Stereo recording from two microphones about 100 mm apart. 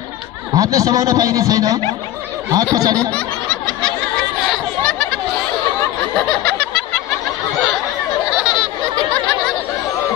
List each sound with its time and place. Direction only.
0.6 s a man's voice: 35° right (ahead or behind)
4.5 s chatter: 10° left (ahead or behind)
6.1 s snicker: 10° left (ahead or behind)
8.3 s a sound: 5° right (ahead or behind)